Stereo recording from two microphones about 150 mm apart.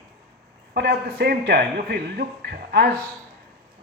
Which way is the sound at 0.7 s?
90° right.